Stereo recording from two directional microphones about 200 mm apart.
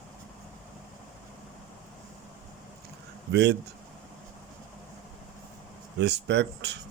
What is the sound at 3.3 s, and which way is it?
Speech, 60° right (ahead or behind).